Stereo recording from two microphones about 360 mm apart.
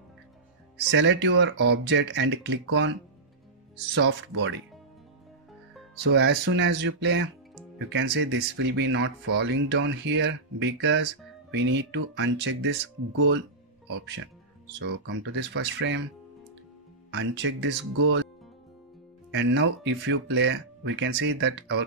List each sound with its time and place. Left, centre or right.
0.8 s speech: right
3.9 s speech: right
6.0 s speech: right
17.1 s speech: right
19.3 s speech: right